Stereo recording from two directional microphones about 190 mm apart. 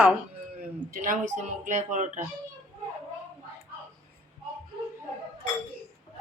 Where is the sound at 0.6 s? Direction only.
50° right (ahead or behind).